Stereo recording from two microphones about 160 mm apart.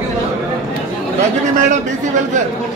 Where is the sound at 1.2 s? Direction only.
50° right (ahead or behind).